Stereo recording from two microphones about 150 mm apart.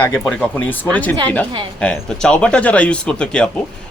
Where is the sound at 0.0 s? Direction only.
10° left (ahead or behind).